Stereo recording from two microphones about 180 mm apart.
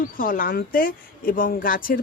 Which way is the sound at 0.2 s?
50° left (ahead or behind).